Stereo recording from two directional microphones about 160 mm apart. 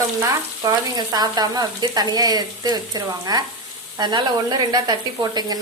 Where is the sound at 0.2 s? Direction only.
25° right (ahead or behind).